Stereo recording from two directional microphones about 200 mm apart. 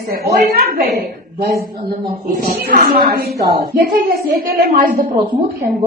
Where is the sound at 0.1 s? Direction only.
50° right (ahead or behind).